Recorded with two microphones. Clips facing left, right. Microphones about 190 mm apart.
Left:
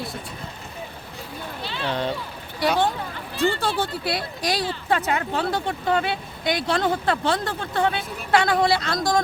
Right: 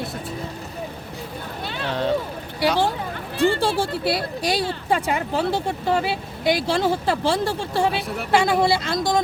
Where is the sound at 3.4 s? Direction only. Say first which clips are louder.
Right 3 dB; 30° right (ahead or behind).